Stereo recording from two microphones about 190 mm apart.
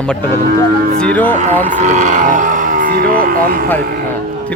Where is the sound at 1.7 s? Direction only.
40° right (ahead or behind).